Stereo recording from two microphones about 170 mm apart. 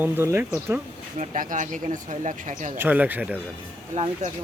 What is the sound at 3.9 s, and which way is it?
Speech, 40° right (ahead or behind).